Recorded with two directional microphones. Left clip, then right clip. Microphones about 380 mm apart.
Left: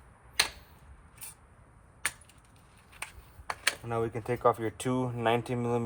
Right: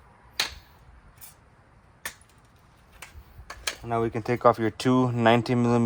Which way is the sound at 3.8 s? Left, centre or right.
Centre.